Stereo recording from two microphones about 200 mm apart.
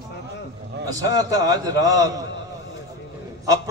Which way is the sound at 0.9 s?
15° right (ahead or behind).